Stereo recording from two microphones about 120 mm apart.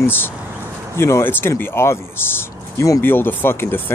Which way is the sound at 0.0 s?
15° left (ahead or behind).